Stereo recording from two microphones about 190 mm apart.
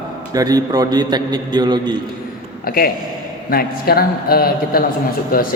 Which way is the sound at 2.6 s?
50° left (ahead or behind).